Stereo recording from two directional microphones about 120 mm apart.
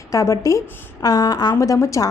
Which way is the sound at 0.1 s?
25° left (ahead or behind).